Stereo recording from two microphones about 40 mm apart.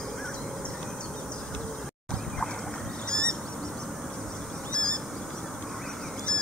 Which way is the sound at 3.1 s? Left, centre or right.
Left.